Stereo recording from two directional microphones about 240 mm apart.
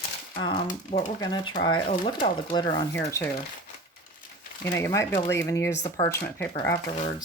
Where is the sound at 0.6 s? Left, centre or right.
Left.